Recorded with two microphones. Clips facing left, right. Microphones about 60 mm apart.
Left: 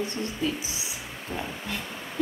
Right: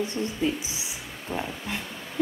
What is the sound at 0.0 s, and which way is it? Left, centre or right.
Speech, right.